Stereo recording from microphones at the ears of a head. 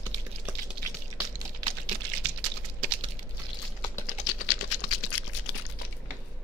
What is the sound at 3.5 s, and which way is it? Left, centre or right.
Typing, left.